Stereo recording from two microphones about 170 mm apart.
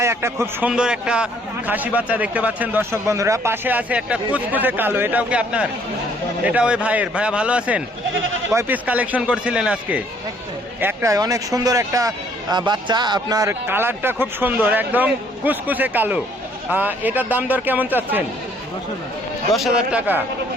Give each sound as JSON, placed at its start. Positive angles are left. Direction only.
{"t": 0.0, "sound": "speech", "side_deg": -15}
{"t": 19.5, "sound": "speech", "side_deg": -5}